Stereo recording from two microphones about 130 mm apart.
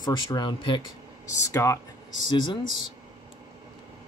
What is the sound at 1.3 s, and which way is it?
Speech, 25° left (ahead or behind).